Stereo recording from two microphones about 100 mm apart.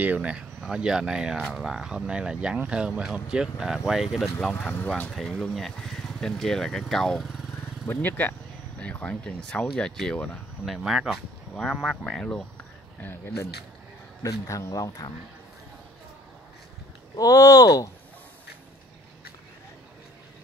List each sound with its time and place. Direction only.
0.0 s speech: 15° right (ahead or behind); by 7.2 s 5° left (ahead or behind)
8.0 s speech: 20° left (ahead or behind)
10.6 s speech: 5° right (ahead or behind)
13.0 s speech: 20° left (ahead or behind)
14.2 s speech: 35° left (ahead or behind)
17.2 s speech: 35° left (ahead or behind)